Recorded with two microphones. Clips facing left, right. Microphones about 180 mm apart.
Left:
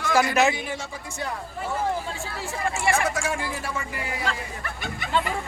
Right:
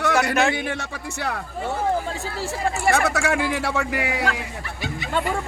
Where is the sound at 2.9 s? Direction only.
75° right (ahead or behind).